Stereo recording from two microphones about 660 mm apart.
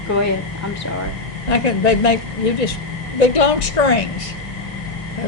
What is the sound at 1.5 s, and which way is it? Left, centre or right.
Speech, left.